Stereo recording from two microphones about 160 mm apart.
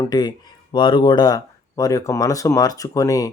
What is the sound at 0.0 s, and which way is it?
Speech, 25° left (ahead or behind).